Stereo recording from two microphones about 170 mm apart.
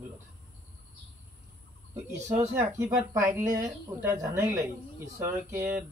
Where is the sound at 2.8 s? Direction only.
15° right (ahead or behind).